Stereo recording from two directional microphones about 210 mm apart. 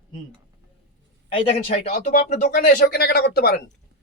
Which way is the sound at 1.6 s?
40° left (ahead or behind).